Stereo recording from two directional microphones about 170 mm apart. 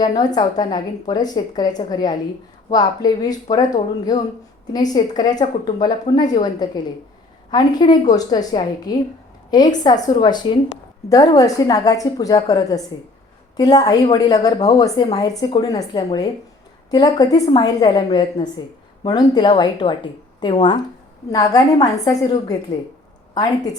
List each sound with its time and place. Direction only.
0.0 s a woman's voice: 20° left (ahead or behind)